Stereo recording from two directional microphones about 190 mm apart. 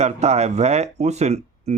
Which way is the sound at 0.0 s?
35° right (ahead or behind).